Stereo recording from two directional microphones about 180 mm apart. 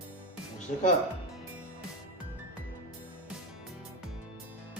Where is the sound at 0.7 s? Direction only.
40° left (ahead or behind).